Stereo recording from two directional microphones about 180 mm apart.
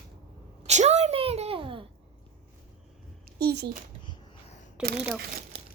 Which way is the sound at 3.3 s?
65° right (ahead or behind).